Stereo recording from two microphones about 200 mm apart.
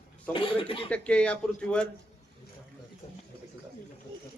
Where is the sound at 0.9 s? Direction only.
5° left (ahead or behind).